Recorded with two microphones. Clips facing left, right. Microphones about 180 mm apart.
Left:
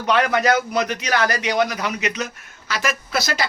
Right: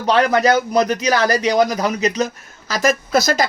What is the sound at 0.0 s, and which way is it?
A man's voice, 35° right (ahead or behind).